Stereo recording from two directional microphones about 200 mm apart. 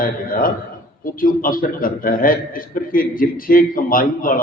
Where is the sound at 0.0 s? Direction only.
45° left (ahead or behind).